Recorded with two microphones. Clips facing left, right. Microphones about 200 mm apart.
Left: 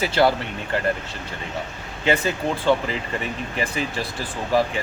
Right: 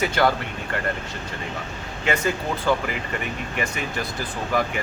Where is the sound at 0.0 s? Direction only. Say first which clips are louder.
Left 2 dB; 30° left (ahead or behind).